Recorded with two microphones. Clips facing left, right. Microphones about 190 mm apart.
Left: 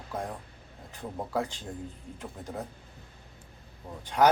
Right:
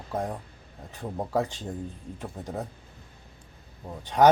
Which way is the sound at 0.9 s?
15° right (ahead or behind).